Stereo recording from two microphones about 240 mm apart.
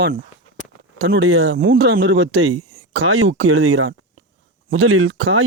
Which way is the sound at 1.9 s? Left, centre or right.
Right.